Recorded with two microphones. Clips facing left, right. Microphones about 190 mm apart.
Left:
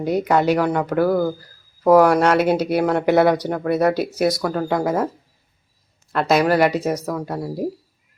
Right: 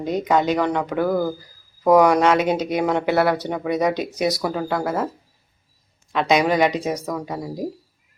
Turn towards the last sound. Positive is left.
turn(degrees=5)  # may be behind; listen again after turning